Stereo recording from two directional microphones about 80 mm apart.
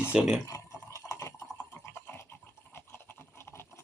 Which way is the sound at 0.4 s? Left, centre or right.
Left.